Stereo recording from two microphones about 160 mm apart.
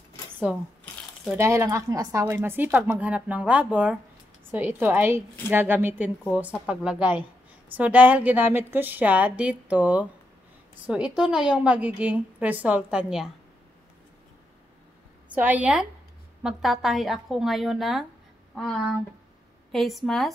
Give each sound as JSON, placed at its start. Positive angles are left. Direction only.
{"t": 0.5, "sound": "a woman's voice", "side_deg": -10}
{"t": 15.3, "sound": "a woman's voice", "side_deg": -10}